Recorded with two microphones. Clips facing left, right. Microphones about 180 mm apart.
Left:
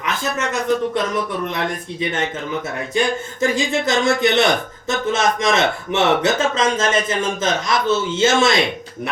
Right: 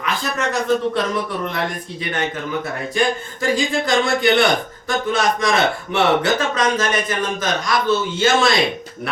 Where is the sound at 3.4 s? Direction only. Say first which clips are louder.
Left 1 dB; 25° left (ahead or behind).